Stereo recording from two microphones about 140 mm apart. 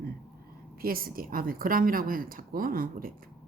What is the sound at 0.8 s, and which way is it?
A woman's voice, 90° right.